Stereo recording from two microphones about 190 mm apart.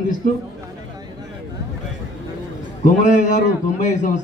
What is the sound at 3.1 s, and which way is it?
A man's voice, 40° left (ahead or behind).